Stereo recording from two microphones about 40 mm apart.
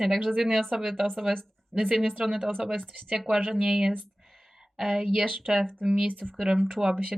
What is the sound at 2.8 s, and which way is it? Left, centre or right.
Speech, right.